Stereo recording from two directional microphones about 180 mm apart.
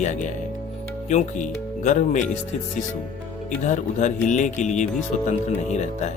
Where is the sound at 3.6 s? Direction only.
45° left (ahead or behind).